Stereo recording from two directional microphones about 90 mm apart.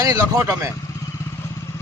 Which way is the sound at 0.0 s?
40° right (ahead or behind).